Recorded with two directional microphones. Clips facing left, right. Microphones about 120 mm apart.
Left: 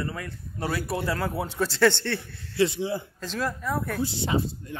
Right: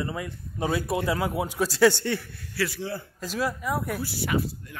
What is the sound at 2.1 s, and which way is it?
Speech, 20° left (ahead or behind).